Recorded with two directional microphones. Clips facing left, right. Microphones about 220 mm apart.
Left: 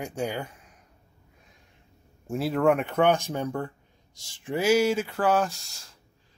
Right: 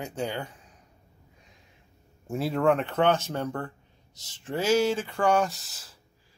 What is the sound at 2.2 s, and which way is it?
Speech, centre (ahead or behind).